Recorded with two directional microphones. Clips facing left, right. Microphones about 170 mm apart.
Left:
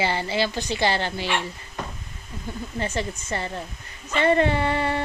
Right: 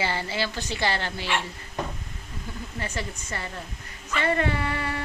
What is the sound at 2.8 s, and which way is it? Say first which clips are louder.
Speech: left 6 dB; 25° left (ahead or behind).